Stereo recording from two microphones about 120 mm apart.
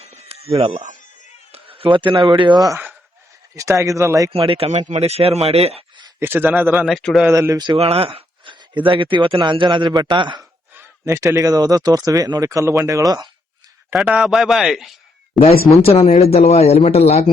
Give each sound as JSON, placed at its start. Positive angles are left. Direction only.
{"t": 0.0, "sound": "a sound", "side_deg": -55}
{"t": 0.5, "sound": "speech", "side_deg": -50}
{"t": 1.5, "sound": "a sound", "side_deg": -50}
{"t": 2.2, "sound": "a man's voice", "side_deg": -40}
{"t": 3.5, "sound": "speech", "side_deg": -25}
{"t": 4.3, "sound": "speech", "side_deg": -50}
{"t": 6.1, "sound": "a man's voice", "side_deg": -20}
{"t": 6.7, "sound": "a man's voice", "side_deg": 0}
{"t": 7.3, "sound": "speech", "side_deg": -25}
{"t": 7.8, "sound": "a man's voice", "side_deg": -55}
{"t": 10.8, "sound": "a man's voice", "side_deg": -25}
{"t": 13.9, "sound": "a man's voice", "side_deg": -5}
{"t": 15.4, "sound": "speech", "side_deg": 55}